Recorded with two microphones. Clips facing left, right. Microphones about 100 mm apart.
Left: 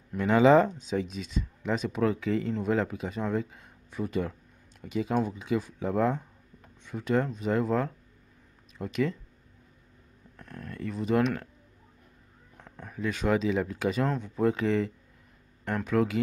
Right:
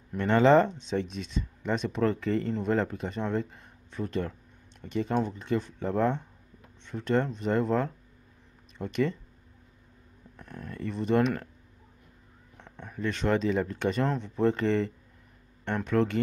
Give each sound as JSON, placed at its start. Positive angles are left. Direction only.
{"t": 0.1, "sound": "speech", "side_deg": 5}
{"t": 10.3, "sound": "speech", "side_deg": 0}
{"t": 12.5, "sound": "speech", "side_deg": 5}